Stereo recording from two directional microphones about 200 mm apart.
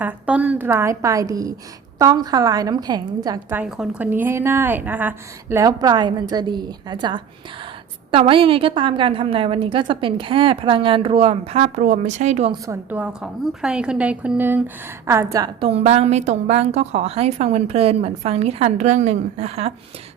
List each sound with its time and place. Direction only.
0.0 s a woman's voice: 5° right (ahead or behind)
3.6 s a woman's voice: 5° right (ahead or behind); by 12.5 s 35° right (ahead or behind)
12.5 s a woman's voice: 15° right (ahead or behind)
15.6 s a woman's voice: 30° right (ahead or behind)